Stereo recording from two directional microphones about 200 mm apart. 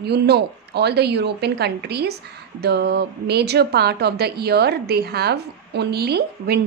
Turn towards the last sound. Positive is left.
turn(degrees=-55)  # may be behind; listen again after turning